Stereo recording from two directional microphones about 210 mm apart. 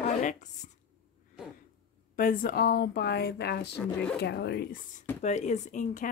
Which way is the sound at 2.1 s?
40° left (ahead or behind).